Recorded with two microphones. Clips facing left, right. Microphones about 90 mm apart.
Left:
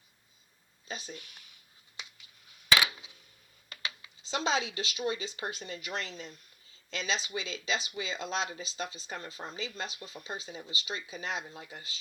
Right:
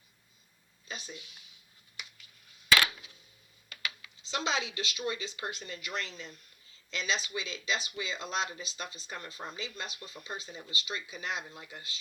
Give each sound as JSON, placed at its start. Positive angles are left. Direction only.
{"t": 0.9, "sound": "speech", "side_deg": 35}
{"t": 3.7, "sound": "speech", "side_deg": 30}